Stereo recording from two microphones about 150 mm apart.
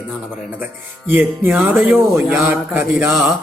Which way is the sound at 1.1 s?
10° right (ahead or behind).